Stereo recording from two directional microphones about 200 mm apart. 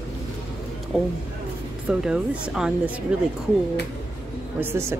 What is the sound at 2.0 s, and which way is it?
Speech, 5° right (ahead or behind).